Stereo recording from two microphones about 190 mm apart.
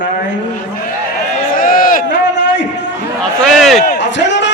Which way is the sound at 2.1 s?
70° left (ahead or behind).